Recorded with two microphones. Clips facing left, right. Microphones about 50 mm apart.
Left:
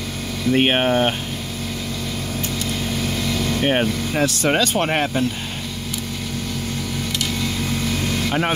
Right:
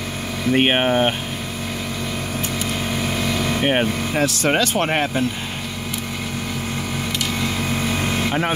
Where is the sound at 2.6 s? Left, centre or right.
Right.